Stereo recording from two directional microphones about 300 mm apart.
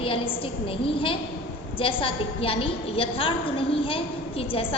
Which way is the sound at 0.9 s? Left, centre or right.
Centre.